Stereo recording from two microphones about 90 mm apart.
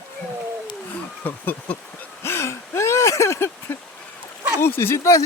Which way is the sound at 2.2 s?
30° left (ahead or behind).